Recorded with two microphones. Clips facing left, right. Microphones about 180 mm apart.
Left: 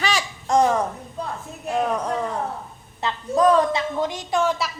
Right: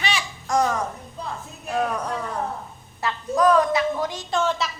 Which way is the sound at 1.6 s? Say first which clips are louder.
Left 2 dB; 20° left (ahead or behind).